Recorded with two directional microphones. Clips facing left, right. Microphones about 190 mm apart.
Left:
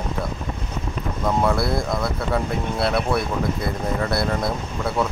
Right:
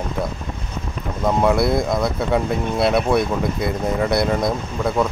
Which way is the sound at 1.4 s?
20° right (ahead or behind).